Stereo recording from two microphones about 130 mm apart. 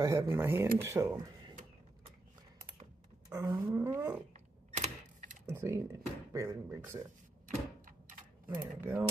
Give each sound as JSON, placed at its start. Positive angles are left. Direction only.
{"t": 0.0, "sound": "speech", "side_deg": -25}
{"t": 3.3, "sound": "speech", "side_deg": -25}
{"t": 4.7, "sound": "typing", "side_deg": -65}
{"t": 5.5, "sound": "speech", "side_deg": -20}
{"t": 7.4, "sound": "door", "side_deg": -85}